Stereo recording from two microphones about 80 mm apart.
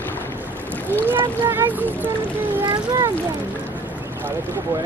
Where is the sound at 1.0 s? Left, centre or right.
Right.